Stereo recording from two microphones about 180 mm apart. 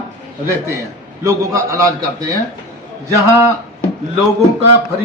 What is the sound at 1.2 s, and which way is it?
A man's voice, 15° right (ahead or behind).